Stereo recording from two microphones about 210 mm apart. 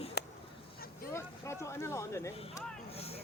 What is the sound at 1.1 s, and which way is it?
Speech, 15° left (ahead or behind).